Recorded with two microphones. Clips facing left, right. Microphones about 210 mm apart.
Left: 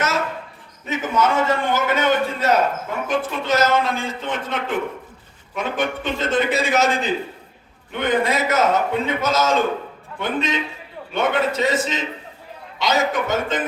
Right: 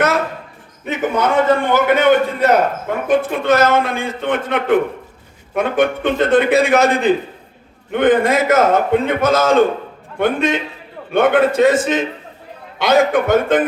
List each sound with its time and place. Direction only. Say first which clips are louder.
0.9 s a man's voice: right 3 dB; 60° right (ahead or behind)